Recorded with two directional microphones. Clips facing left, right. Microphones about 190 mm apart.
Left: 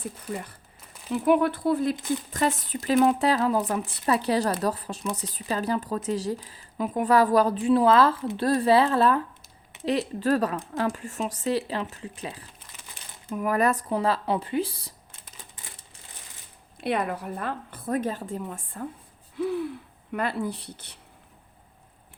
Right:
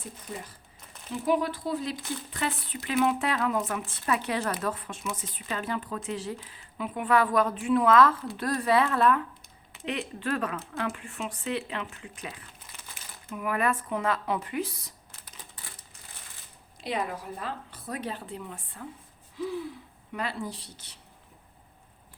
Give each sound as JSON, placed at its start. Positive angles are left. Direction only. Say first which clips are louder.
{"t": 1.1, "sound": "speech", "louder": "left 5 dB", "side_deg": 60}
{"t": 16.8, "sound": "a woman's voice", "louder": "left 5 dB", "side_deg": 60}
{"t": 19.4, "sound": "speech", "louder": "left 5 dB", "side_deg": 60}